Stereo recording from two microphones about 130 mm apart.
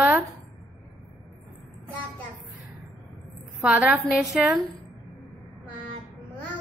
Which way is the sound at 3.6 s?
10° right (ahead or behind).